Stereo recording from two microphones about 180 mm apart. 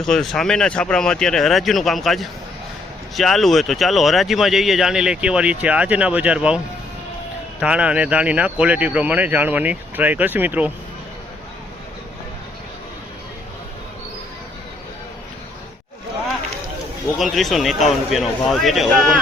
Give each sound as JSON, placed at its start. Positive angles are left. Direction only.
{"t": 0.0, "sound": "speech", "side_deg": 0}
{"t": 7.6, "sound": "speech", "side_deg": -5}
{"t": 17.2, "sound": "speech", "side_deg": 0}